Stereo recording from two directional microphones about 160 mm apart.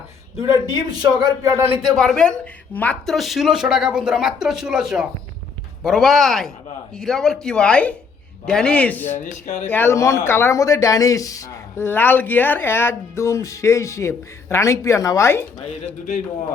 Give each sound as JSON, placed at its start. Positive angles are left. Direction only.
{"t": 0.7, "sound": "a man's voice", "side_deg": -25}
{"t": 1.8, "sound": "speech", "side_deg": 0}
{"t": 9.2, "sound": "speech", "side_deg": 50}
{"t": 9.6, "sound": "speech", "side_deg": 15}